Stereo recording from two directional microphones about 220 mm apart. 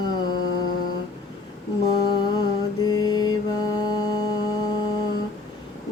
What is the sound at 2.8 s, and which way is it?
Mantra, 15° left (ahead or behind).